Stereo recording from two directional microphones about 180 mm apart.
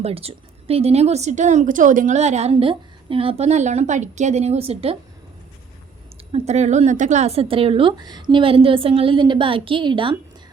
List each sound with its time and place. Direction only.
0.0 s a woman's voice: 35° right (ahead or behind)
6.3 s a woman's voice: 40° right (ahead or behind)